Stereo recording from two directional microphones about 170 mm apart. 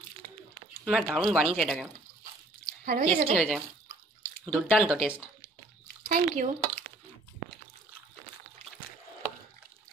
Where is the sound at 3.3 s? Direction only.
Centre (ahead or behind).